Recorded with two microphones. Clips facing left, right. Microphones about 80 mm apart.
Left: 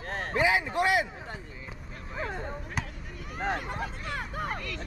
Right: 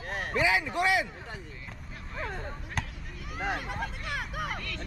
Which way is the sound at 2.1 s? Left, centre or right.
Centre.